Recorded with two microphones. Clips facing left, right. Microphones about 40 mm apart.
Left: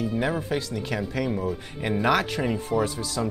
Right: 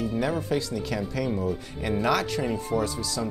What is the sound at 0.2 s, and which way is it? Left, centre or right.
Speech, left.